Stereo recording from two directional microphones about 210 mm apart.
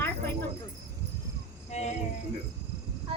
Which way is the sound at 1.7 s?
30° left (ahead or behind).